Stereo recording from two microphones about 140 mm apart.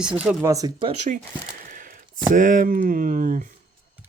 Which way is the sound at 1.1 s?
60° right (ahead or behind).